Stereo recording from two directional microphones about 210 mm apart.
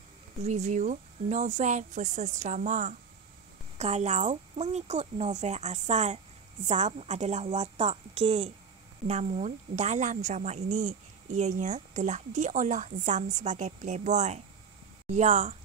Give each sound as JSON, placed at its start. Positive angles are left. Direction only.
{"t": 0.4, "sound": "a woman's voice", "side_deg": -35}